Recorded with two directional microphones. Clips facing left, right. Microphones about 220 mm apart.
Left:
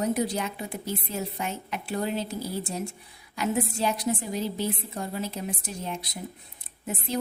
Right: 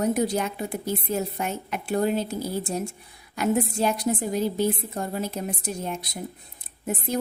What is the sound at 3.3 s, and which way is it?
A woman's voice, 50° right (ahead or behind).